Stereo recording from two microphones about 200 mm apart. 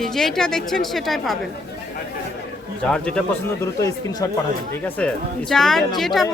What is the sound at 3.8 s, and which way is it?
Speech, 15° left (ahead or behind).